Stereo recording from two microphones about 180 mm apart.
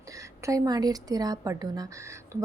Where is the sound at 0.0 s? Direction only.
15° right (ahead or behind).